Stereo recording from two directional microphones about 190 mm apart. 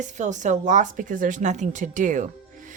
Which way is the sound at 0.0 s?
40° right (ahead or behind).